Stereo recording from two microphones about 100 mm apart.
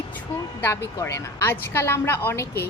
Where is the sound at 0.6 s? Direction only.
25° left (ahead or behind).